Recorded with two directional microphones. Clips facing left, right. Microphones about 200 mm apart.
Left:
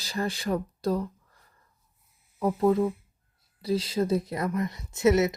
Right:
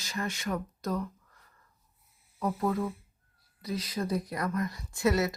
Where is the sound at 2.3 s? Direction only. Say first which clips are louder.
Left 7 dB; 25° left (ahead or behind).